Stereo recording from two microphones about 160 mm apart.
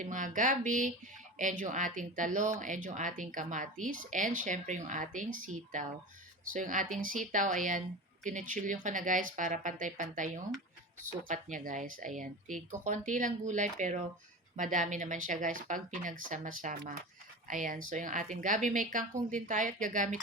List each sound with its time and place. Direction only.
0.0 s speech: 55° right (ahead or behind)